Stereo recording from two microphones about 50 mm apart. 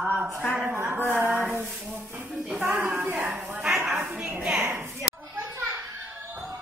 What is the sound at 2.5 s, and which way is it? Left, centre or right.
Speech, right.